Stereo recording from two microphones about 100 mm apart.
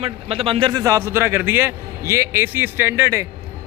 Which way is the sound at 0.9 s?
25° right (ahead or behind).